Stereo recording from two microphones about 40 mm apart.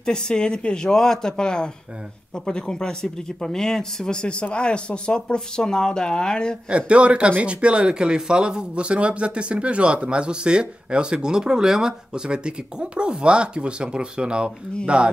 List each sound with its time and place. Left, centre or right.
0.0 s speech: centre
6.9 s speech: right